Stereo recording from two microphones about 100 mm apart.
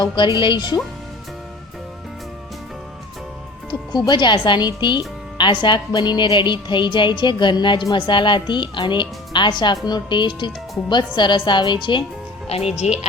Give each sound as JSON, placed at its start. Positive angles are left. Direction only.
{"t": 0.4, "sound": "speech", "side_deg": 50}
{"t": 3.7, "sound": "speech", "side_deg": 45}
{"t": 12.5, "sound": "speech", "side_deg": 90}